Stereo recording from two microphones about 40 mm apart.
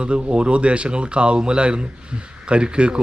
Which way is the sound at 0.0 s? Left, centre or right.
Right.